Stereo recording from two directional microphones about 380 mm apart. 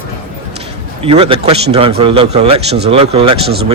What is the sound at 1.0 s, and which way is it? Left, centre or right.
A man's voice, centre.